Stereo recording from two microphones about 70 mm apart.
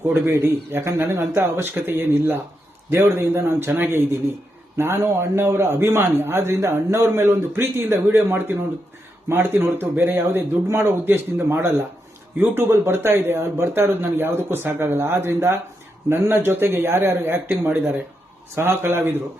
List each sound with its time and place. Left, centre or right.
0.3 s a man's voice: right
18.5 s a man's voice: right